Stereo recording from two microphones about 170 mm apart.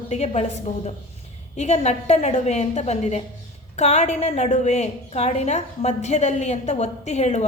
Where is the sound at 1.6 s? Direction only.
40° left (ahead or behind).